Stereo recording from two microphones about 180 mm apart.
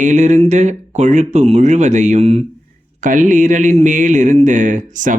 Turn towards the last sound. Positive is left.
turn(degrees=-45)  # may be behind; listen again after turning